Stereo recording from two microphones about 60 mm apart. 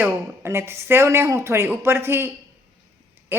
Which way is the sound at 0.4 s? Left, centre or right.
Right.